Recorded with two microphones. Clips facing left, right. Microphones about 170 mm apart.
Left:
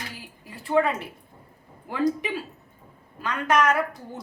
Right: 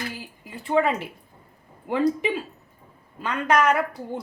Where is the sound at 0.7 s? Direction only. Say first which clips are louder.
Right 1 dB; 20° right (ahead or behind).